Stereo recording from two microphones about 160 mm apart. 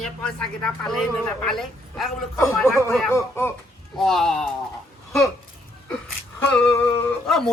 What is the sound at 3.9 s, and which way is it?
Speech, centre (ahead or behind).